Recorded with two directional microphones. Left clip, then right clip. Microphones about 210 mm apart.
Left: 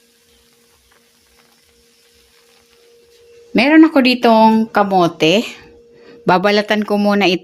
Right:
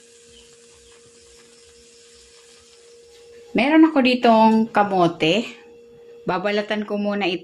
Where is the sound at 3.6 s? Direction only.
55° left (ahead or behind).